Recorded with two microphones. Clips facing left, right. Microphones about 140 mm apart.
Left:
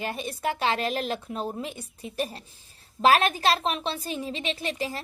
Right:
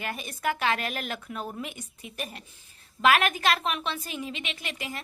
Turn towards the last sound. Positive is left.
turn(degrees=30)  # may be behind; listen again after turning